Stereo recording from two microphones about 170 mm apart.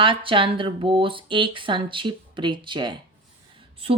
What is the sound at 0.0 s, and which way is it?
Speech, 30° right (ahead or behind).